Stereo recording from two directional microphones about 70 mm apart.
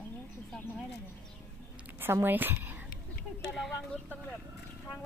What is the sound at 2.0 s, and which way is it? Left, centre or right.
Speech, right.